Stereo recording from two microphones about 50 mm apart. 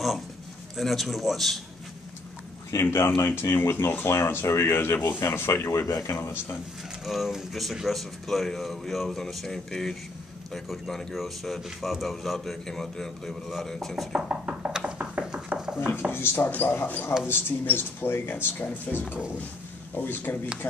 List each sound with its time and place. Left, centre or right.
0.7 s speech: centre
2.7 s speech: left
3.3 s speech: left
4.1 s speech: left
5.2 s speech: left
5.7 s speech: left
7.1 s a man's voice: centre
14.1 s speech: right
15.3 s a sound: centre
16.1 s speech: left
16.4 s speech: left